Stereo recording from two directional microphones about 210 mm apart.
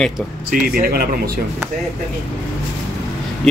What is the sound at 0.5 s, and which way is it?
Speech, 45° right (ahead or behind).